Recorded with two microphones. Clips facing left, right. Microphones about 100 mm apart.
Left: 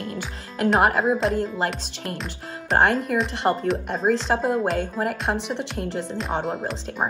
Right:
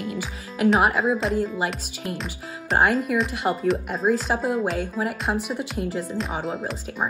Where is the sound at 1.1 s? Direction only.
Centre (ahead or behind).